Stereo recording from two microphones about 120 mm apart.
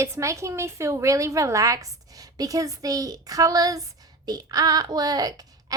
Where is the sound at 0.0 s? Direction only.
25° right (ahead or behind).